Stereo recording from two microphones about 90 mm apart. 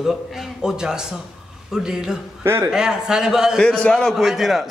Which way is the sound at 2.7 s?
5° right (ahead or behind).